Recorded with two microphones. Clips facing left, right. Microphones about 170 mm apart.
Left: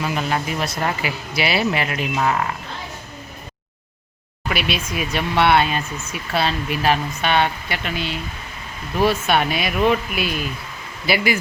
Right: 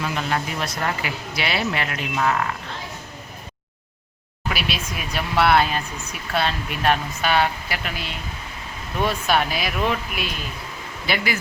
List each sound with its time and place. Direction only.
0.2 s speech: 10° left (ahead or behind)
2.1 s speech: 20° left (ahead or behind)
4.4 s speech: centre (ahead or behind)